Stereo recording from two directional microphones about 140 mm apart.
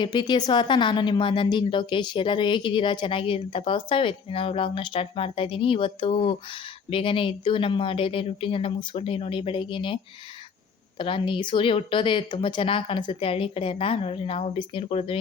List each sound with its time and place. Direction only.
0.0 s speech: 35° left (ahead or behind)